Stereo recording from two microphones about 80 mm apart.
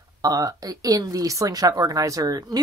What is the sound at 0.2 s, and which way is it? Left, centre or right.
A woman's voice, right.